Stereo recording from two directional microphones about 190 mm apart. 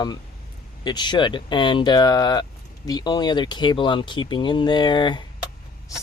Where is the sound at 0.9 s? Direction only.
25° left (ahead or behind).